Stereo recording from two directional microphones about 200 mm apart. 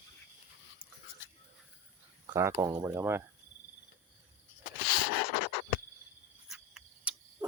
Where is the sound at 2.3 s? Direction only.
20° right (ahead or behind).